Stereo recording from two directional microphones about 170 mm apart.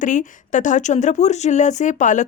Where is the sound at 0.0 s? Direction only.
50° left (ahead or behind).